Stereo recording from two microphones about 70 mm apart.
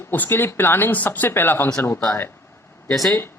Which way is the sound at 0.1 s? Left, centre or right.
Left.